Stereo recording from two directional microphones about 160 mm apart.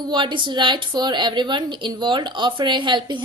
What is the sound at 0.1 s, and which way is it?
A woman's voice, 30° right (ahead or behind).